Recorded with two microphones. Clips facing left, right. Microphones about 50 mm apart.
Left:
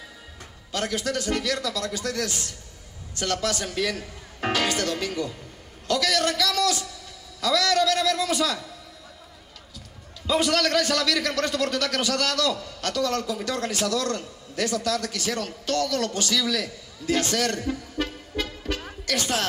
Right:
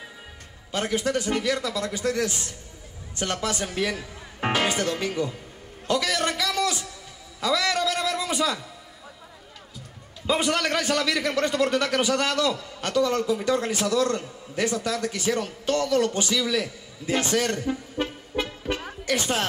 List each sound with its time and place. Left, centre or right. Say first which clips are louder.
0.7 s a man's voice: right 2 dB; right
10.2 s a man's voice: left 1 dB; right
18.9 s music: right 1 dB; right